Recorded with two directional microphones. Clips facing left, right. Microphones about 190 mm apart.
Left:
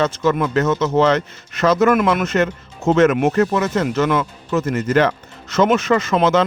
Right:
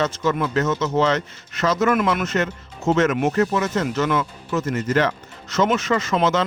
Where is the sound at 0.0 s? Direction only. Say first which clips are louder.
Left 4 dB; 60° left (ahead or behind).